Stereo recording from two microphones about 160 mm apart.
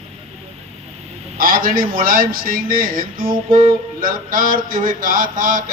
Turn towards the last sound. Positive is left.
turn(degrees=-60)  # may be behind; listen again after turning